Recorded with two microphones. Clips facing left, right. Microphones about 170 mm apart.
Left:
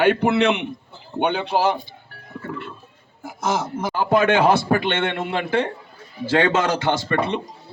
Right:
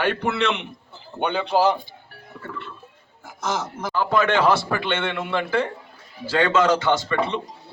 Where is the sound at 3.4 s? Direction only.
50° left (ahead or behind).